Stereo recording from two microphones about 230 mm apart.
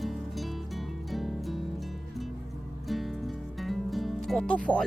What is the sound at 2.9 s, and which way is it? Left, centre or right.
Music, centre.